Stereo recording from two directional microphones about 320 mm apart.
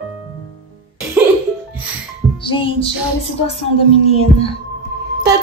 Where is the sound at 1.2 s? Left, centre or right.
Centre.